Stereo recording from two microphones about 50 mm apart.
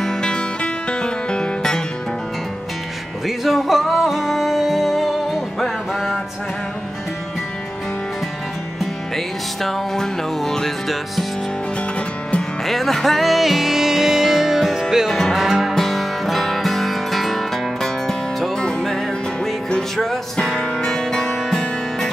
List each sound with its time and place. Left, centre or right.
0.0 s music: centre
3.3 s music: centre
9.1 s music: centre
12.6 s music: centre
20.0 s music: centre